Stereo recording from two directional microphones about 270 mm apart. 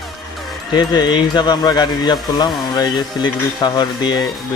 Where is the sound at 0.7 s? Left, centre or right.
Centre.